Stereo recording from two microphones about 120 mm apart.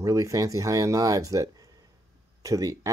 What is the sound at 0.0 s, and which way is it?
Speech, 25° right (ahead or behind).